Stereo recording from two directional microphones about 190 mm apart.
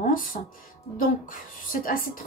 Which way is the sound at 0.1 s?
45° left (ahead or behind).